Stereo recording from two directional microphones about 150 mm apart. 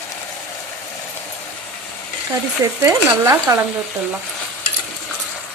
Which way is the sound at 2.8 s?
20° right (ahead or behind).